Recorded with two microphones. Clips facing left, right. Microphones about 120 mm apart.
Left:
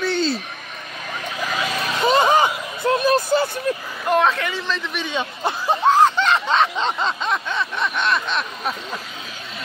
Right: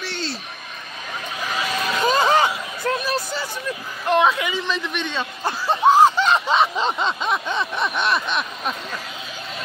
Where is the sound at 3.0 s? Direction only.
50° left (ahead or behind).